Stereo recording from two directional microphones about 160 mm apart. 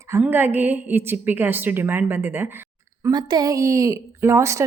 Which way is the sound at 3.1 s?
25° right (ahead or behind).